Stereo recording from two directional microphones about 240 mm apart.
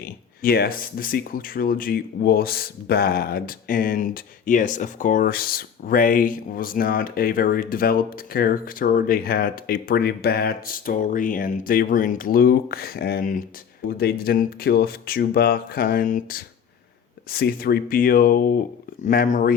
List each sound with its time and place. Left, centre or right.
0.0 s speech: left